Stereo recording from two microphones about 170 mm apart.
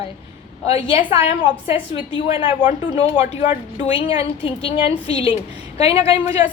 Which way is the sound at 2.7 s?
40° left (ahead or behind).